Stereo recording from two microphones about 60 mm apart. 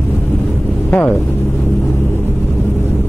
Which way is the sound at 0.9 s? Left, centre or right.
Left.